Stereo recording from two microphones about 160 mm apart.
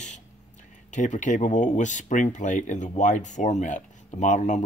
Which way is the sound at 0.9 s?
50° left (ahead or behind).